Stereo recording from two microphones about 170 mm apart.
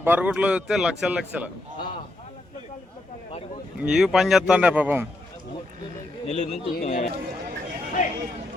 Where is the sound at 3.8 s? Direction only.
5° right (ahead or behind).